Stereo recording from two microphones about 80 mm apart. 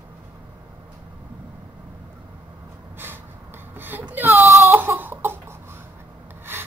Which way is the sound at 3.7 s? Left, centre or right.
Right.